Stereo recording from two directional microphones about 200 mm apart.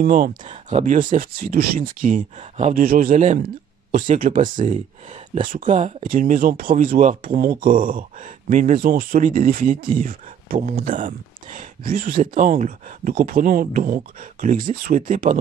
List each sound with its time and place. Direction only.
0.0 s speech: 40° right (ahead or behind)